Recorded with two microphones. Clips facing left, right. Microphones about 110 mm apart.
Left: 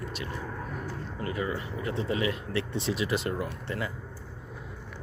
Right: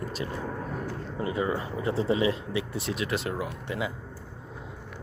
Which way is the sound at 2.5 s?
15° right (ahead or behind).